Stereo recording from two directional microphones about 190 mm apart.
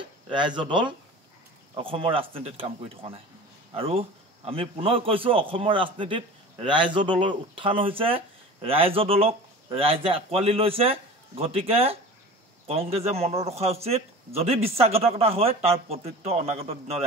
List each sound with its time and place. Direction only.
0.3 s a man's voice: 25° right (ahead or behind)